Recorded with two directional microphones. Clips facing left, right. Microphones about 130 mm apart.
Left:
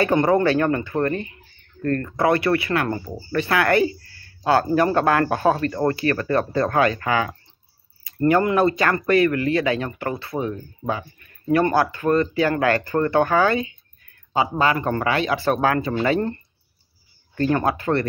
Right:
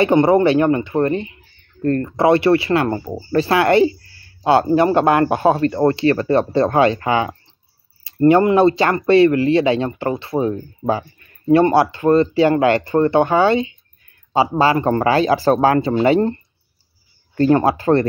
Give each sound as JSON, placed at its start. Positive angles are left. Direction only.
{"t": 0.0, "sound": "speech", "side_deg": -20}
{"t": 17.4, "sound": "speech", "side_deg": -30}